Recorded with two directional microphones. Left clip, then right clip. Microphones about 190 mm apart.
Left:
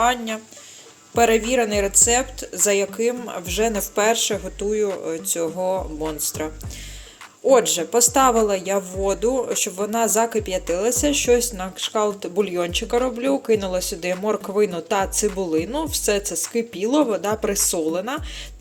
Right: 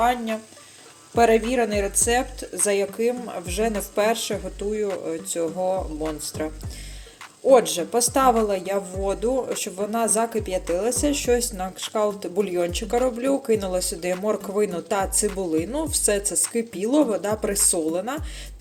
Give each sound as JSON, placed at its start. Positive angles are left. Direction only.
{"t": 0.0, "sound": "speech", "side_deg": 0}